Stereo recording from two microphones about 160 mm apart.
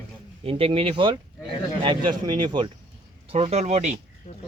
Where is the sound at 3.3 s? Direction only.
40° right (ahead or behind).